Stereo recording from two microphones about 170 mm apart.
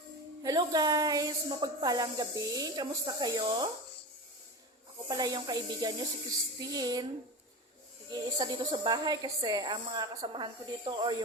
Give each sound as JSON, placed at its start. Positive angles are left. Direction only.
{"t": 0.4, "sound": "speech", "side_deg": -20}
{"t": 5.0, "sound": "speech", "side_deg": -25}
{"t": 8.1, "sound": "speech", "side_deg": -25}